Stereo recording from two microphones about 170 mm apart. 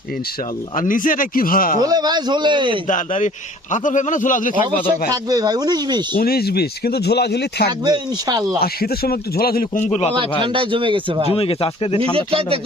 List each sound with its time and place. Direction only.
0.8 s a man's voice: 50° left (ahead or behind)
1.8 s a man's voice: 25° right (ahead or behind)
2.8 s a man's voice: 50° left (ahead or behind)
5.1 s a man's voice: 20° right (ahead or behind)
6.1 s speech: 65° left (ahead or behind)
7.9 s a man's voice: 25° right (ahead or behind)
8.6 s speech: 65° left (ahead or behind)
9.8 s speech: 40° left (ahead or behind)
10.4 s speech: 30° right (ahead or behind)
11.3 s speech: 35° left (ahead or behind)
12.1 s speech: 35° right (ahead or behind)